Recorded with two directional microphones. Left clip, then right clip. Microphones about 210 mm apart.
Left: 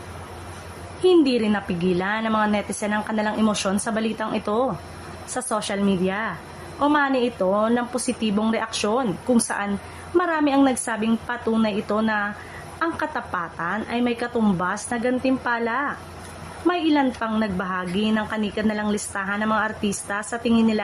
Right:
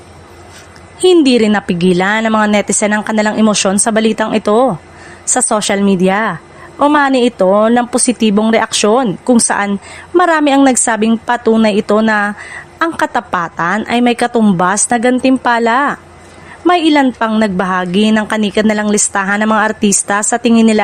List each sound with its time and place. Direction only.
1.0 s a woman's voice: 45° right (ahead or behind)